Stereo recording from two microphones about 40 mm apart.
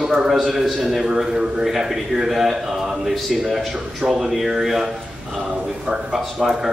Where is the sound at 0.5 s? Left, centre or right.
Centre.